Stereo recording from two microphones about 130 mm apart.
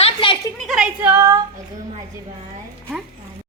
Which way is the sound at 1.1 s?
20° right (ahead or behind).